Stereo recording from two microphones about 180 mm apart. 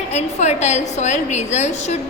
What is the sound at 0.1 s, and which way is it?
A woman's voice, 40° left (ahead or behind).